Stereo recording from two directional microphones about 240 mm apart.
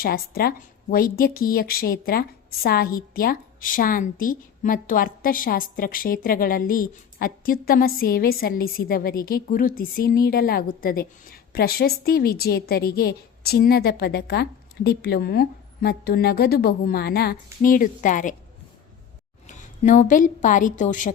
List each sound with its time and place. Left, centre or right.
0.0 s speech: left
19.5 s a woman's voice: left